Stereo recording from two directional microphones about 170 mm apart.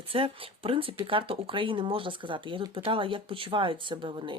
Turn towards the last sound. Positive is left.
turn(degrees=-30)  # may be behind; listen again after turning